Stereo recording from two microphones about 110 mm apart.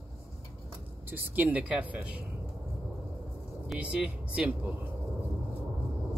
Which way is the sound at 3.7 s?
10° right (ahead or behind).